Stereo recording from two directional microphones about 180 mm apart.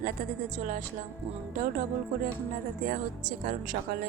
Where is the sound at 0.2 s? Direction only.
50° right (ahead or behind).